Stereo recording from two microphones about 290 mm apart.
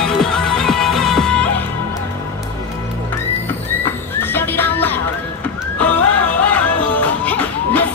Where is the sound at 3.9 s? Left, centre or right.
Centre.